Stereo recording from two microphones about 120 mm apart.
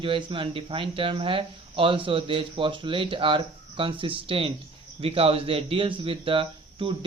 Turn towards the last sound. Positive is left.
turn(degrees=-45)  # may be behind; listen again after turning